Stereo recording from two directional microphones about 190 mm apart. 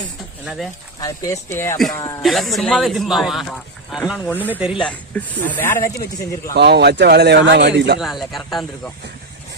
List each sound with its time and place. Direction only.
0.4 s a man's voice: centre (ahead or behind)
0.9 s speech: 20° left (ahead or behind)
2.2 s a man's voice: centre (ahead or behind)
4.8 s speech: 5° left (ahead or behind)
6.5 s a man's voice: 60° right (ahead or behind)
7.9 s a man's voice: centre (ahead or behind)